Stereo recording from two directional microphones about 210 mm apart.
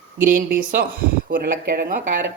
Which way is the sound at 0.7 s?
40° right (ahead or behind).